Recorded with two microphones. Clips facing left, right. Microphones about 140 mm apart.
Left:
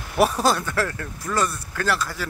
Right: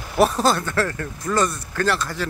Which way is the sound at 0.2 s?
10° left (ahead or behind).